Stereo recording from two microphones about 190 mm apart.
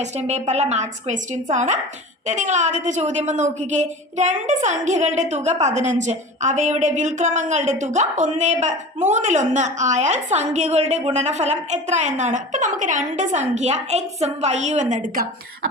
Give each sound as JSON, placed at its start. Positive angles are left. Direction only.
{"t": 0.0, "sound": "a woman's voice", "side_deg": -35}